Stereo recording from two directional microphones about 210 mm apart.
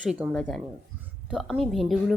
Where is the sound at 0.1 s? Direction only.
Centre (ahead or behind).